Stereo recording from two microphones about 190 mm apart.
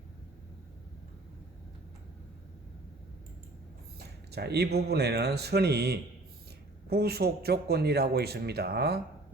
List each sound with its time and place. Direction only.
3.9 s speech: 60° right (ahead or behind)